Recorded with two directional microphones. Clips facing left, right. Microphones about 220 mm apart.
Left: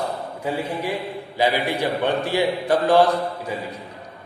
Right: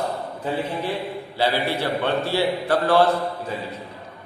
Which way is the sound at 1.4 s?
15° left (ahead or behind).